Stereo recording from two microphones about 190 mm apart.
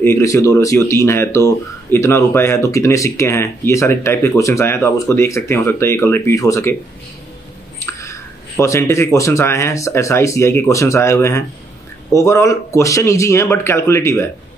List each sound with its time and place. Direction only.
0.0 s speech: 15° left (ahead or behind)
7.8 s speech: 15° left (ahead or behind)